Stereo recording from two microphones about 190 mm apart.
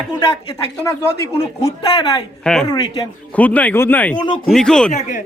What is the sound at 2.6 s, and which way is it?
Speech, 20° left (ahead or behind).